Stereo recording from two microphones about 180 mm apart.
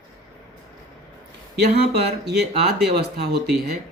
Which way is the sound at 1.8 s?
65° right (ahead or behind).